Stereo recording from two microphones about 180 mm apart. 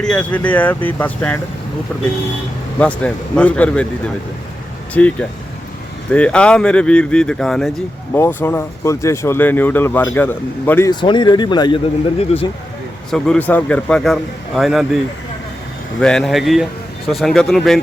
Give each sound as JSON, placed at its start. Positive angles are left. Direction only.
{"t": 0.0, "sound": "speech", "side_deg": 5}
{"t": 2.7, "sound": "speech", "side_deg": 5}
{"t": 4.9, "sound": "speech", "side_deg": 5}
{"t": 11.0, "sound": "speech", "side_deg": 25}
{"t": 13.1, "sound": "speech", "side_deg": 5}
{"t": 16.0, "sound": "speech", "side_deg": 5}